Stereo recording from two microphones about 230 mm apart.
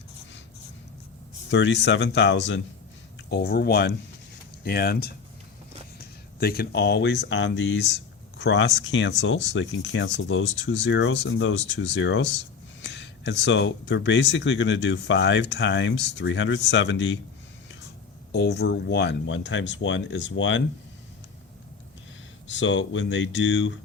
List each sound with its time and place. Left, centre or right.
1.5 s speech: left
18.3 s speech: left
22.4 s speech: left